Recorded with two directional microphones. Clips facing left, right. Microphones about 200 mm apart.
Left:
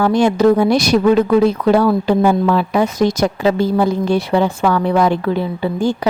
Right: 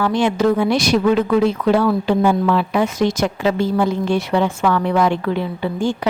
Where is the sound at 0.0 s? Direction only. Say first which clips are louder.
Left 4 dB; 40° left (ahead or behind).